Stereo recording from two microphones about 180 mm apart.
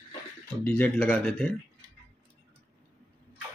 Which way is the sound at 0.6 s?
10° left (ahead or behind).